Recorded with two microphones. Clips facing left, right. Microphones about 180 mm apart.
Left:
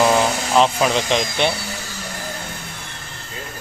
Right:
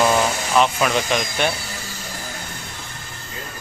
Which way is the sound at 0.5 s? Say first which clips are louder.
Left 2 dB; 30° left (ahead or behind).